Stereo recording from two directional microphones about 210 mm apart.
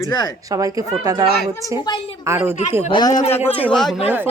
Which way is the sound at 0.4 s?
15° right (ahead or behind).